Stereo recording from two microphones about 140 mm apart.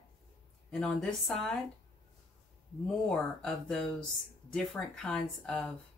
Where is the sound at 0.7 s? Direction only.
10° left (ahead or behind).